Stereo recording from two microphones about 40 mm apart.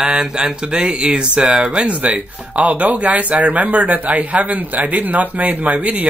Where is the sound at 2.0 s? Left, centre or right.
Right.